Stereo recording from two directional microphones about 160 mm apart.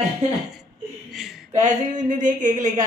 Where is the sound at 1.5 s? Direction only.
50° right (ahead or behind).